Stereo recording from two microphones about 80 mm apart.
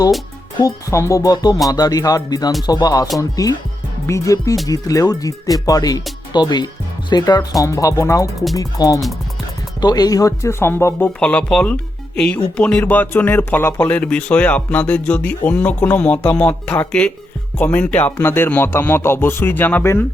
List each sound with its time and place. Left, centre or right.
0.6 s speech: left
6.3 s speech: left
11.2 s speech: centre